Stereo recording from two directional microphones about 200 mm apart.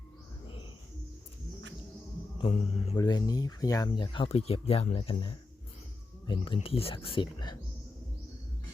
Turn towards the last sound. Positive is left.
turn(degrees=25)  # may be behind; listen again after turning